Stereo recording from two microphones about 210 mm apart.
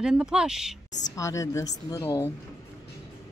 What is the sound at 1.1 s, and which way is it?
Speech, 15° left (ahead or behind).